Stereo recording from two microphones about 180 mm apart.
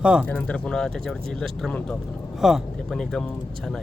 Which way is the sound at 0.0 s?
5° right (ahead or behind).